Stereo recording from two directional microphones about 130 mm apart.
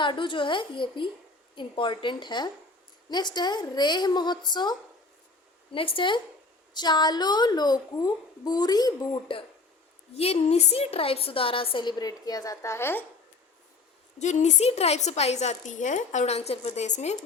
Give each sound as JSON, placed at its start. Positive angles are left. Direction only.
{"t": 0.0, "sound": "a child's voice", "side_deg": 40}
{"t": 5.7, "sound": "a woman's voice", "side_deg": 45}
{"t": 9.3, "sound": "a woman's voice", "side_deg": 40}
{"t": 14.2, "sound": "a woman's voice", "side_deg": 65}